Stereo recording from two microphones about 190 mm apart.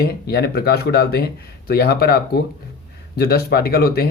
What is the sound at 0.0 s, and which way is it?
Speech, 55° left (ahead or behind).